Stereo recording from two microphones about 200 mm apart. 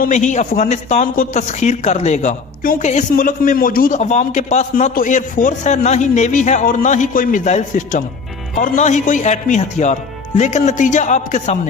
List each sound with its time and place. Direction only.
0.0 s a man's voice: 35° left (ahead or behind)